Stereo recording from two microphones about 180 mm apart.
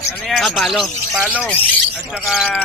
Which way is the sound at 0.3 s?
Centre (ahead or behind).